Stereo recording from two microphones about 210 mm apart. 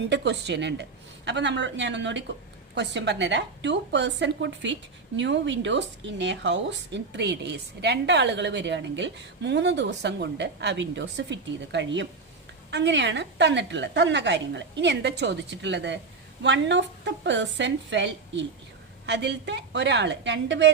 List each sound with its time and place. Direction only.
0.1 s a woman's voice: 55° right (ahead or behind)